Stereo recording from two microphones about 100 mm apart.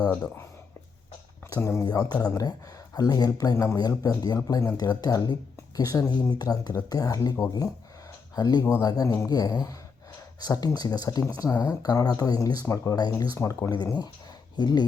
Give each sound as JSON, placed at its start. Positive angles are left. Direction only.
{"t": 1.5, "sound": "speech", "side_deg": 30}
{"t": 14.5, "sound": "speech", "side_deg": 45}